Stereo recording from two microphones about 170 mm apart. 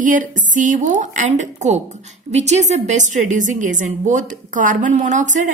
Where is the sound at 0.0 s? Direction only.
50° right (ahead or behind).